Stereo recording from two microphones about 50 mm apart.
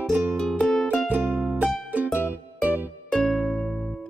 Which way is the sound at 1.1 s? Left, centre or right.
Right.